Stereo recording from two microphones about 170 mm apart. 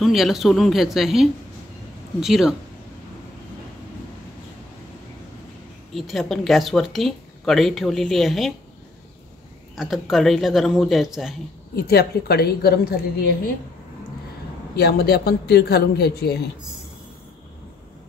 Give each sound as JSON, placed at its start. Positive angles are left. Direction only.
{"t": 0.0, "sound": "speech", "side_deg": 0}
{"t": 5.9, "sound": "speech", "side_deg": 0}
{"t": 9.8, "sound": "speech", "side_deg": 0}
{"t": 11.7, "sound": "a woman's voice", "side_deg": 70}
{"t": 14.8, "sound": "a woman's voice", "side_deg": 65}